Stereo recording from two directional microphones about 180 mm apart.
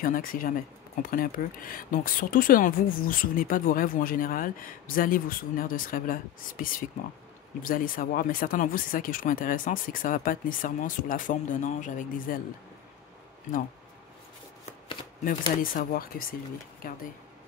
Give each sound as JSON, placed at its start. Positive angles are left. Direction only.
{"t": 0.0, "sound": "speech", "side_deg": 50}
{"t": 15.2, "sound": "speech", "side_deg": 50}